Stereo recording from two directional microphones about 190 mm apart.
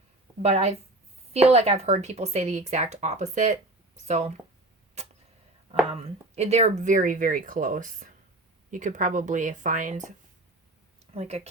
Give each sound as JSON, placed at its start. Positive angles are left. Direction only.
{"t": 0.4, "sound": "speech", "side_deg": -35}
{"t": 5.9, "sound": "speech", "side_deg": -35}